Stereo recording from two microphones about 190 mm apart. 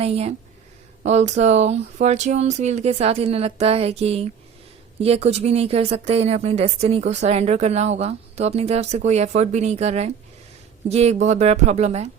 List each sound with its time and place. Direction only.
0.0 s speech: 35° right (ahead or behind)